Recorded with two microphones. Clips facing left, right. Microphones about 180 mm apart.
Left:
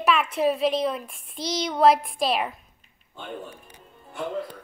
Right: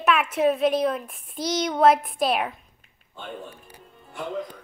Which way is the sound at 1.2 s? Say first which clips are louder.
Right 3 dB; 30° left (ahead or behind).